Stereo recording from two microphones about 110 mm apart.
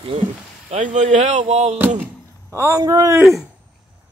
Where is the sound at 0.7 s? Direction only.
90° right.